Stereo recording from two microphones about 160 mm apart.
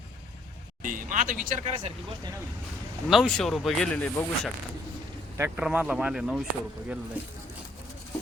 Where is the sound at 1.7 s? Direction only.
40° right (ahead or behind).